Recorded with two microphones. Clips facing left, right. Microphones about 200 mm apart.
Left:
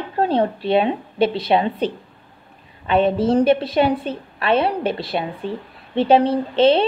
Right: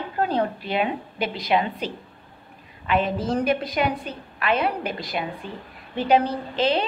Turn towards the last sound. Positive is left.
turn(degrees=30)  # may be behind; listen again after turning